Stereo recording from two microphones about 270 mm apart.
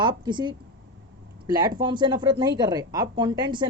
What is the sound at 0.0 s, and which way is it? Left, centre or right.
Speech, centre.